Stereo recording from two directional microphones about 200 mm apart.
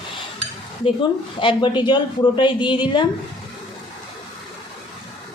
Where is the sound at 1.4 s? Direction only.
25° left (ahead or behind).